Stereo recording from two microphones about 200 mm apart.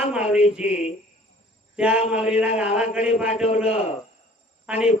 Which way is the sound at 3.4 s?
30° left (ahead or behind).